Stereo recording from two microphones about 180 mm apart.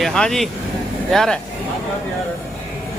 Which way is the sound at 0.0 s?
5° left (ahead or behind).